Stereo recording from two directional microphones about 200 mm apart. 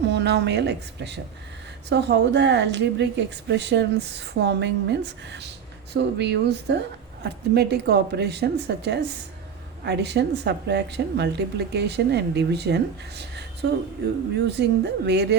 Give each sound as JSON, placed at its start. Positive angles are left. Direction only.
{"t": 0.1, "sound": "speech", "side_deg": -60}